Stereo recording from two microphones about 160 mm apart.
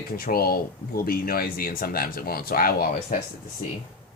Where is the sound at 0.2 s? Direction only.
70° left (ahead or behind).